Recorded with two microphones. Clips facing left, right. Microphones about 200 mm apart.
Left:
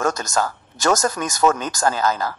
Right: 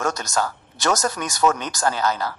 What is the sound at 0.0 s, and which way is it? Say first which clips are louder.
A man's voice: left 2 dB; 50° left (ahead or behind).